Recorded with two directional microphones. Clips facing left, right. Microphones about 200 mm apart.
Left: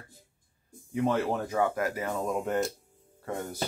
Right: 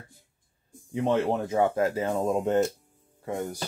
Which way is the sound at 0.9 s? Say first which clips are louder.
Right 2 dB; 25° right (ahead or behind).